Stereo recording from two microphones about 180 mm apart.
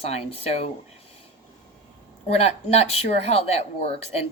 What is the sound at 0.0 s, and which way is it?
Speech, 35° left (ahead or behind).